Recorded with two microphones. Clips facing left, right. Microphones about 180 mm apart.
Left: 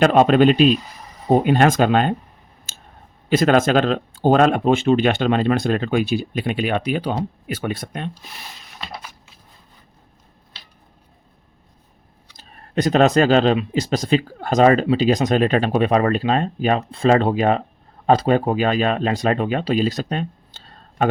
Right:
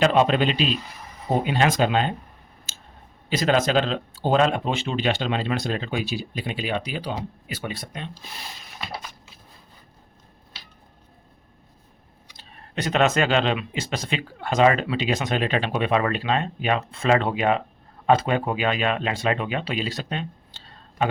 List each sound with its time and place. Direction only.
0.0 s speech: 50° left (ahead or behind)
2.7 s clicking: 50° left (ahead or behind)
3.2 s speech: 55° left (ahead or behind)
12.4 s speech: 45° left (ahead or behind)